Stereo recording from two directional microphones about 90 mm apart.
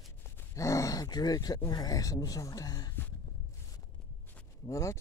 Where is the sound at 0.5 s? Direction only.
35° left (ahead or behind).